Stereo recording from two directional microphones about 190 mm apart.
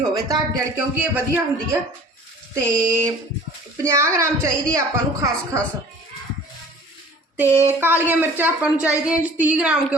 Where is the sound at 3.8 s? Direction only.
15° right (ahead or behind).